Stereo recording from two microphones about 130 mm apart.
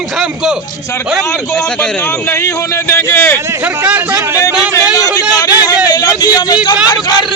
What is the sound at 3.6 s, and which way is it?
Speech, 15° right (ahead or behind).